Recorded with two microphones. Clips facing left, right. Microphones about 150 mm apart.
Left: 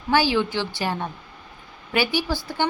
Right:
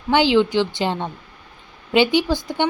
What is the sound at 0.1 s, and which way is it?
Speech, 20° right (ahead or behind).